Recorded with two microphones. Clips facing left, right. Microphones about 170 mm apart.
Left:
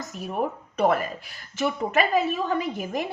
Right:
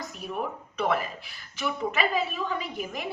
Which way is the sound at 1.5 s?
45° left (ahead or behind).